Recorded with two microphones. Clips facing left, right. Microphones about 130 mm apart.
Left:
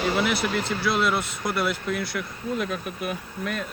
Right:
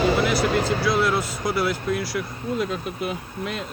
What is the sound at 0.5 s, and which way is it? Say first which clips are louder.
Speech: right 5 dB; 55° right (ahead or behind).